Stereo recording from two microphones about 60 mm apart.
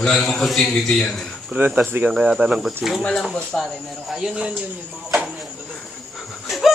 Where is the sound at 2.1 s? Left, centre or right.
Centre.